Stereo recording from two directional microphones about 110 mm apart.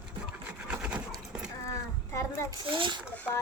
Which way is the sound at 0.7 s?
10° right (ahead or behind).